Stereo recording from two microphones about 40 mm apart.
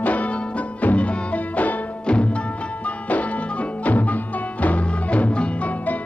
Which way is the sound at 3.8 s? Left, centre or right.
Left.